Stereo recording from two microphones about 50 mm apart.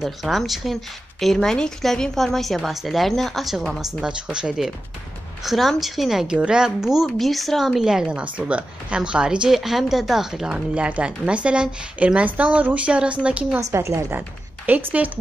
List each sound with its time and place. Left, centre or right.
0.0 s speech: centre
4.0 s speech: centre
5.4 s speech: centre
6.2 s speech: centre
7.8 s speech: centre
8.2 s a woman's voice: right
9.5 s speech: centre
10.5 s a woman's voice: right
14.8 s speech: right